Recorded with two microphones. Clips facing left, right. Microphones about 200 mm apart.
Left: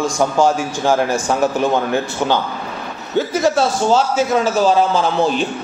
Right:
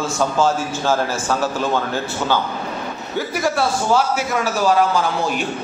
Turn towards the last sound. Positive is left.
turn(degrees=25)  # may be behind; listen again after turning